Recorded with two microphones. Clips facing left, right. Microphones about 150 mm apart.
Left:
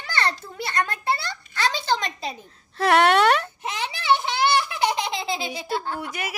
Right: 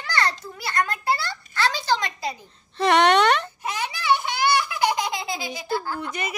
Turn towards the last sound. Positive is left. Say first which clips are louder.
# right 1 dB
turn(degrees=10)  # may be behind; listen again after turning